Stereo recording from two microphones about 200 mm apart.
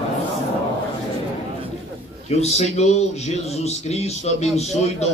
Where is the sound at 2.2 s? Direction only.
30° left (ahead or behind).